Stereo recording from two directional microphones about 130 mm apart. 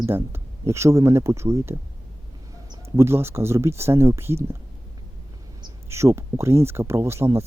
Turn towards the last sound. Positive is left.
turn(degrees=-20)  # may be behind; listen again after turning